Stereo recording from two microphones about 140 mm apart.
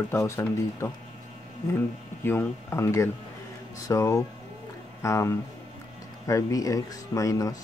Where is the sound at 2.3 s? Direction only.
15° left (ahead or behind).